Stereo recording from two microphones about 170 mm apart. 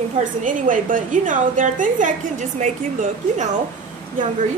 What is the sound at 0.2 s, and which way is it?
A woman's voice, 50° right (ahead or behind).